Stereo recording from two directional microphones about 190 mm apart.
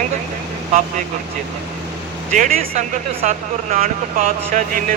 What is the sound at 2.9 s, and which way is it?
Speech, 40° right (ahead or behind).